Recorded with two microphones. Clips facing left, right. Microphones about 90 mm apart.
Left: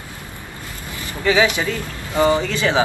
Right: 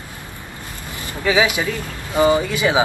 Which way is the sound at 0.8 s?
20° right (ahead or behind).